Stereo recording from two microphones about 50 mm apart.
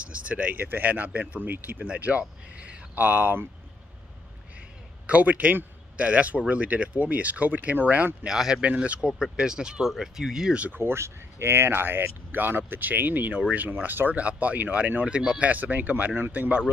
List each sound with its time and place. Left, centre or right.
0.0 s speech: right
5.0 s speech: right
8.3 s speech: centre
8.5 s speech: right
9.0 s speech: centre
10.8 s speech: right